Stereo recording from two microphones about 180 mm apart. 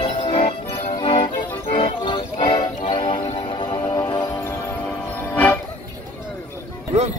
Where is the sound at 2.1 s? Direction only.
25° left (ahead or behind).